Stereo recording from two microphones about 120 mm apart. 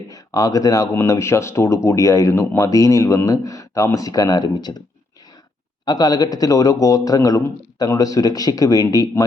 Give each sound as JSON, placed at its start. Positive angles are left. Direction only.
{"t": 0.1, "sound": "speech", "side_deg": 30}
{"t": 5.8, "sound": "speech", "side_deg": 35}